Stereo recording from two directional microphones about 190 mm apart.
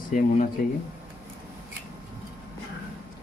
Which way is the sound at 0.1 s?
45° left (ahead or behind).